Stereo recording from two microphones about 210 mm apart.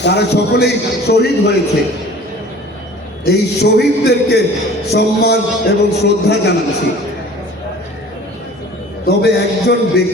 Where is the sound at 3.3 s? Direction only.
50° left (ahead or behind).